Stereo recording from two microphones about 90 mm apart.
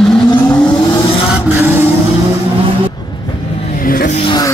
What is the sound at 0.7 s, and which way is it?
Vehicle, 70° left (ahead or behind).